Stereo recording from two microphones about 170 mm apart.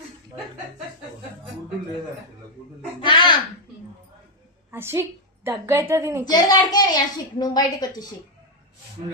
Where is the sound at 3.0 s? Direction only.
30° left (ahead or behind).